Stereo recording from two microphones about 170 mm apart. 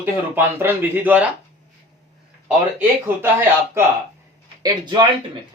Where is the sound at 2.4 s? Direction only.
10° right (ahead or behind).